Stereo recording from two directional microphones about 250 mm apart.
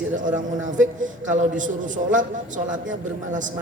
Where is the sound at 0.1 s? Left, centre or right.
Right.